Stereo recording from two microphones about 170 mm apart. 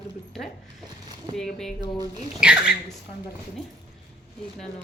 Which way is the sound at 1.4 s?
5° left (ahead or behind).